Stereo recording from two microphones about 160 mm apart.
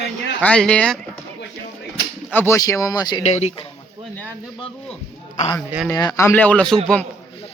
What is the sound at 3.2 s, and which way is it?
Speech, 45° left (ahead or behind).